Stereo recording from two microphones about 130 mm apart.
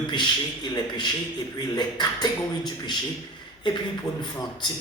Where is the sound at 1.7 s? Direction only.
30° left (ahead or behind).